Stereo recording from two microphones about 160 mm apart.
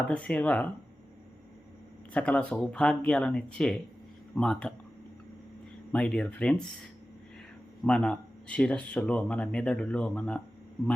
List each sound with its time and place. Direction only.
0.1 s speech: 10° left (ahead or behind)
2.1 s speech: 10° left (ahead or behind)
5.9 s speech: 5° left (ahead or behind)
7.8 s speech: 5° left (ahead or behind)